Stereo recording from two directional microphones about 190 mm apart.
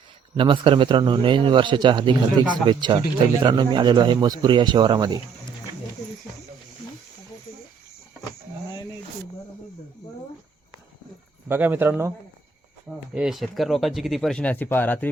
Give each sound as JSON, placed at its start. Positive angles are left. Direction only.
{"t": 0.3, "sound": "a man's voice", "side_deg": -25}
{"t": 11.4, "sound": "speech", "side_deg": -10}
{"t": 13.1, "sound": "speech", "side_deg": 0}